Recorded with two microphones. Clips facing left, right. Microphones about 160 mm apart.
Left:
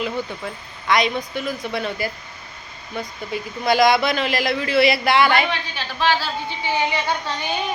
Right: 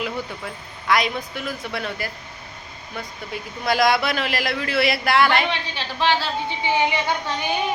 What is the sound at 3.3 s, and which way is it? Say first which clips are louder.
Speech: left 3 dB; centre (ahead or behind).